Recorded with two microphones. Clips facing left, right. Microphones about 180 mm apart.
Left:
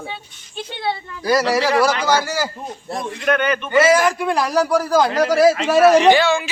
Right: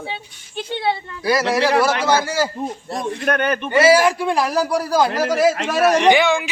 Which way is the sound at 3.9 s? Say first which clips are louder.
Right 2 dB; 30° right (ahead or behind).